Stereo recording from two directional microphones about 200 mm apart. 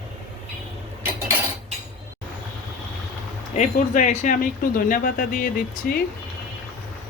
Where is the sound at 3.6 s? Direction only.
40° left (ahead or behind).